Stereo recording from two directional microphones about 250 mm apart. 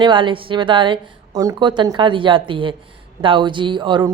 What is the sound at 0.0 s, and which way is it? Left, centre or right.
A woman's voice, centre.